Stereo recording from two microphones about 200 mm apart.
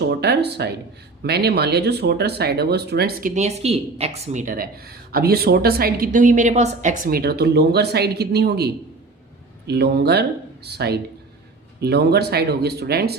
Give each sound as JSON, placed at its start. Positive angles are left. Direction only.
{"t": 0.1, "sound": "speech", "side_deg": -55}